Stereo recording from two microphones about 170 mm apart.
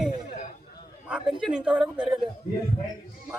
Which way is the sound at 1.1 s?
5° right (ahead or behind).